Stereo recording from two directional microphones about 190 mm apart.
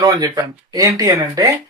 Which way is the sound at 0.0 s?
20° right (ahead or behind).